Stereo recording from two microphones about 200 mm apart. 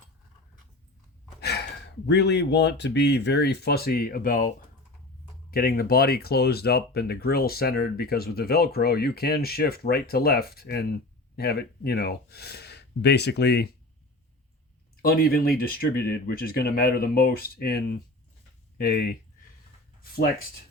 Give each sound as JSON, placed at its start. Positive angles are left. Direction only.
{"t": 1.4, "sound": "gasp", "side_deg": 55}
{"t": 2.0, "sound": "speech", "side_deg": 60}
{"t": 15.0, "sound": "speech", "side_deg": 50}